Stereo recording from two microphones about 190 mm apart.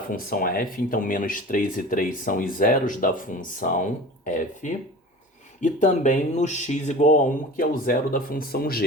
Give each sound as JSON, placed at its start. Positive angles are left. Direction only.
{"t": 0.1, "sound": "speech", "side_deg": 50}
{"t": 5.5, "sound": "speech", "side_deg": 40}